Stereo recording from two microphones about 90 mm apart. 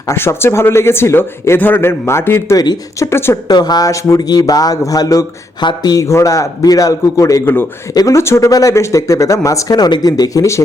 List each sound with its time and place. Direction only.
0.1 s speech: 30° left (ahead or behind)
3.5 s speech: 45° left (ahead or behind)
6.0 s speech: 35° left (ahead or behind)
7.4 s speech: 25° left (ahead or behind)
7.9 s speech: 35° left (ahead or behind)